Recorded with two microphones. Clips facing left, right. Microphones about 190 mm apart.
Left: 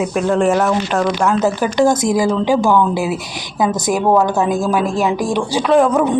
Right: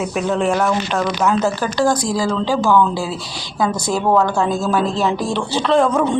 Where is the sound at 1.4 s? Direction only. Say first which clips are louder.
Left 3 dB; 15° left (ahead or behind).